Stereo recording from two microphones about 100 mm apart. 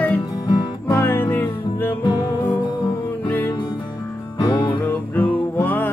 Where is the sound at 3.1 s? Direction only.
20° left (ahead or behind).